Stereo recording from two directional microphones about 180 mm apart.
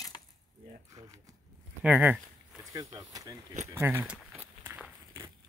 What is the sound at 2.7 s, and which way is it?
Speech, 20° right (ahead or behind).